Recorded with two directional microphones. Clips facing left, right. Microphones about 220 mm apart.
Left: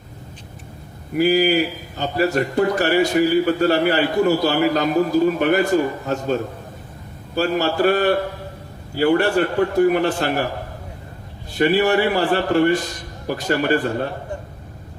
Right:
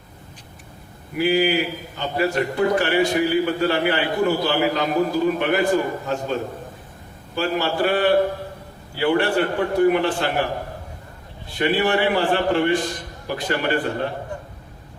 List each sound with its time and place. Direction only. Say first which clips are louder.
1.2 s a man's voice: left 3 dB; 40° left (ahead or behind)
7.3 s a man's voice: left 3 dB; 45° left (ahead or behind)
11.5 s a man's voice: left 3 dB; 40° left (ahead or behind)